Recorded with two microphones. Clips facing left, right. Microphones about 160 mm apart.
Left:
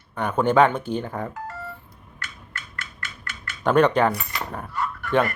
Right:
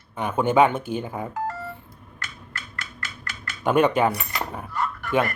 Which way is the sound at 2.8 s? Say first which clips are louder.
Right 1 dB; 40° right (ahead or behind).